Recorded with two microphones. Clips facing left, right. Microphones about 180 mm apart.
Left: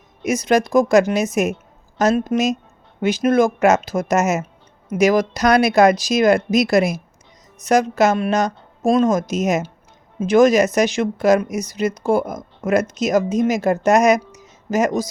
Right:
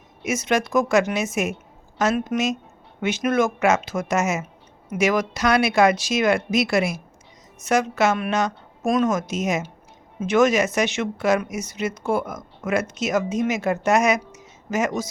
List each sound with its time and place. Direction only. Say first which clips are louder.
0.2 s speech: left 5 dB; 35° left (ahead or behind)